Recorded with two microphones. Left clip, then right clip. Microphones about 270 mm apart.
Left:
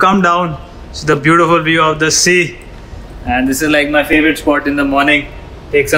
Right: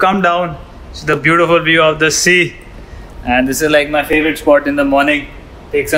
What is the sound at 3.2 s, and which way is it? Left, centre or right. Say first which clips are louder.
Speech: right 2 dB; right.